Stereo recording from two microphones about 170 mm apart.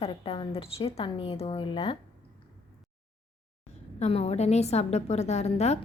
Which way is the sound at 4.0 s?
40° left (ahead or behind).